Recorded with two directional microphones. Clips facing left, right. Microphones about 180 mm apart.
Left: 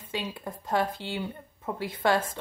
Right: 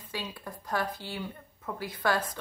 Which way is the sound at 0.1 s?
20° left (ahead or behind).